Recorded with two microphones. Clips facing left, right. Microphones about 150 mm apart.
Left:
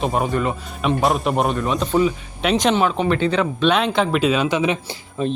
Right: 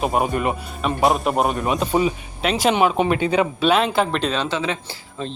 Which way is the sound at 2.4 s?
Centre (ahead or behind).